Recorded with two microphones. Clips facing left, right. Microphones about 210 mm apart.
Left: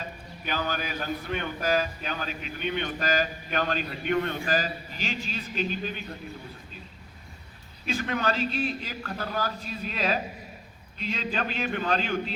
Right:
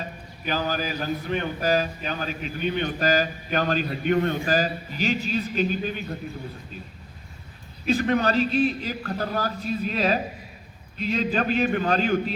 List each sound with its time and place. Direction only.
0.4 s a man's voice: 40° right (ahead or behind)
7.9 s a man's voice: 40° right (ahead or behind)